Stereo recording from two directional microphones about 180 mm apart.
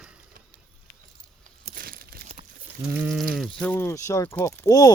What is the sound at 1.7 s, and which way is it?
Crumpling, 55° right (ahead or behind).